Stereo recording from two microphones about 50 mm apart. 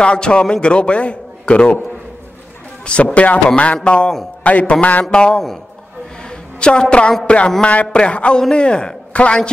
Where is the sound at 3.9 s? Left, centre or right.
Centre.